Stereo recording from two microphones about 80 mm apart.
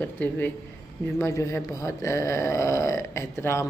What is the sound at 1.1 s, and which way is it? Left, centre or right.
Speech, left.